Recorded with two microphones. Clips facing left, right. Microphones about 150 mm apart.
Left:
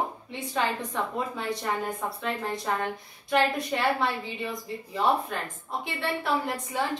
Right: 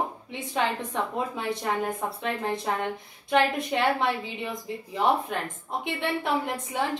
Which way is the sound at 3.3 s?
20° right (ahead or behind).